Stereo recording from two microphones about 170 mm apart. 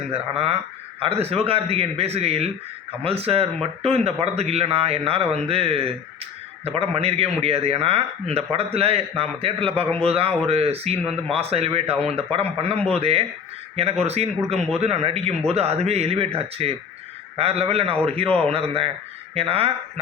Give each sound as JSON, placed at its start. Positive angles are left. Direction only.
{"t": 0.1, "sound": "a man's voice", "side_deg": -35}